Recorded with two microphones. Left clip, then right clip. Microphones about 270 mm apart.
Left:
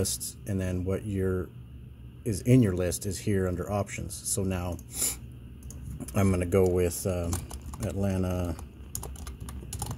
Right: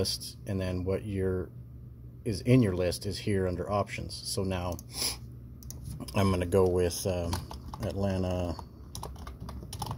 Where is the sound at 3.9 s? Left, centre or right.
Left.